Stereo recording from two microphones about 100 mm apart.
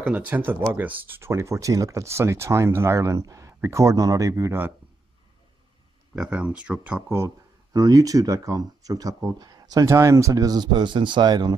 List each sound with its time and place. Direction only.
0.0 s speech: 20° right (ahead or behind)
6.1 s speech: 10° right (ahead or behind); by 11.5 s 45° right (ahead or behind)